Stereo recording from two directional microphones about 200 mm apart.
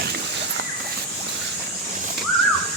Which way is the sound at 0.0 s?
55° right (ahead or behind).